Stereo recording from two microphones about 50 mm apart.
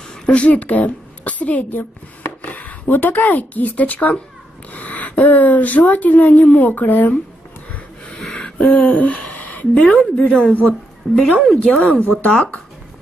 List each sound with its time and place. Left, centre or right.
0.3 s a woman's voice: left
8.4 s throat clearing: left
8.6 s speech: left
11.1 s a woman's voice: centre